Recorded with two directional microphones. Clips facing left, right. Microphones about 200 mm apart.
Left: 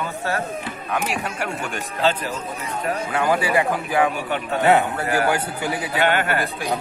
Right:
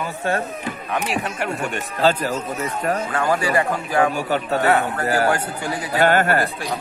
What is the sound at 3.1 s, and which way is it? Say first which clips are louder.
Speech: left 2 dB; 5° left (ahead or behind).